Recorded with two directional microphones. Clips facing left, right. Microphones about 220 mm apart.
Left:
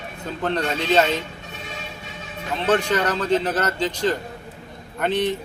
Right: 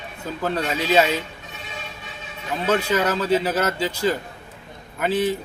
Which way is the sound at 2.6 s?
10° right (ahead or behind).